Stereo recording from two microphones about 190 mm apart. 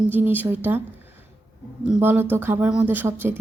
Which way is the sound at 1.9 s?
10° right (ahead or behind).